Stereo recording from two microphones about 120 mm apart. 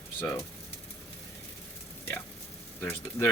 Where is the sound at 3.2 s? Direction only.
25° left (ahead or behind).